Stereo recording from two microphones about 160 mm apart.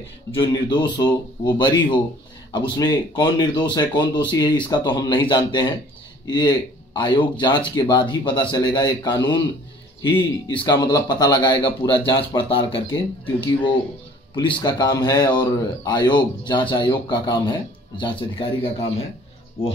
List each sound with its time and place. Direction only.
0.3 s speech: 30° left (ahead or behind)